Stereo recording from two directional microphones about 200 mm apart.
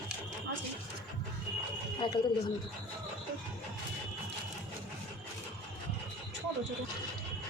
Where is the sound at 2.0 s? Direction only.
25° left (ahead or behind).